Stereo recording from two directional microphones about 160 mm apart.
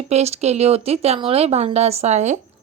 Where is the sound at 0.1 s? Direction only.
40° right (ahead or behind).